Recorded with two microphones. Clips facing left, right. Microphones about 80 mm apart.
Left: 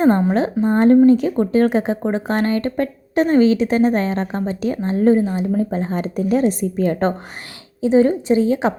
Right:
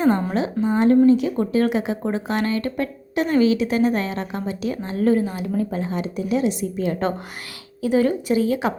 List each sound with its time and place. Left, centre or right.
0.3 s speech: left
7.8 s a woman's voice: left